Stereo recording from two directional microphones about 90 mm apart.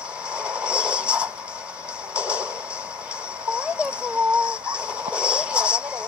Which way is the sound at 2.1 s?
10° right (ahead or behind).